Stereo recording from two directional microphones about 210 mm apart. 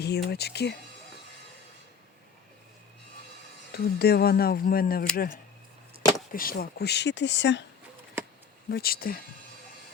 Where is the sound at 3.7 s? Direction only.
50° left (ahead or behind).